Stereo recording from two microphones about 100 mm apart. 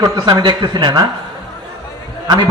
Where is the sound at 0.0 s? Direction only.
45° right (ahead or behind).